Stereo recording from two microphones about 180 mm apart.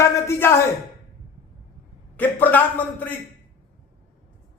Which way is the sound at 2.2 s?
10° left (ahead or behind).